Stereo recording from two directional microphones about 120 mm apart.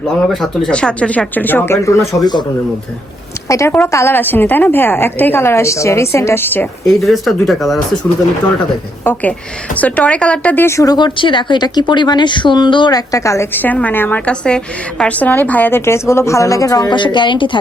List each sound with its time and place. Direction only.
0.6 s a woman's voice: 10° left (ahead or behind); by 2.3 s 25° left (ahead or behind)
3.7 s a woman's voice: 20° left (ahead or behind)
6.8 s speech: centre (ahead or behind)
9.7 s a woman's voice: 10° left (ahead or behind)
10.9 s speech: 40° left (ahead or behind)
16.9 s speech: 40° left (ahead or behind)